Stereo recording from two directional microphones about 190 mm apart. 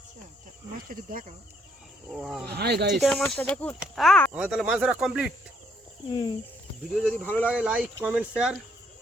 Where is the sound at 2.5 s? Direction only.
60° right (ahead or behind).